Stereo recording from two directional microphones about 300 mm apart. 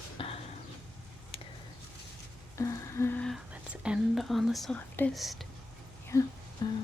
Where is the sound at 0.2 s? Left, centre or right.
Centre.